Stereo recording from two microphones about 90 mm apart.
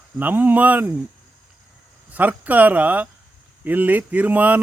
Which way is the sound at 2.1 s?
20° right (ahead or behind).